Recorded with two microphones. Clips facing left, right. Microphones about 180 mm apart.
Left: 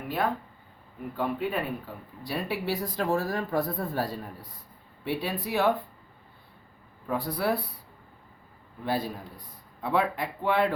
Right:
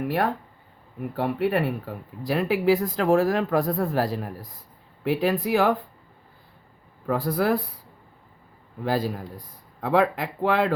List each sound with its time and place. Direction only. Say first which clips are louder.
1.1 s speech: right 5 dB; 80° right
7.1 s speech: right 5 dB; 90° right
8.8 s speech: right 5 dB; 90° right